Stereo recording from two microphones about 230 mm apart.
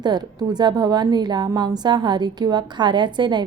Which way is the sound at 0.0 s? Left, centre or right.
Centre.